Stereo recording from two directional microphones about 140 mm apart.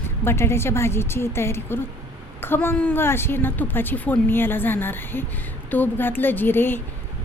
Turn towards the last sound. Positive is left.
turn(degrees=15)  # may be behind; listen again after turning